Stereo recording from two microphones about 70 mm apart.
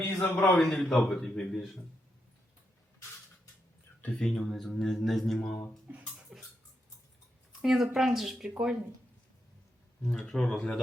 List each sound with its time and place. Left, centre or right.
0.0 s a sound: left
0.6 s a man's voice: centre
4.2 s speech: centre
6.3 s a sound: centre
7.6 s a woman's voice: centre
10.0 s a man's voice: centre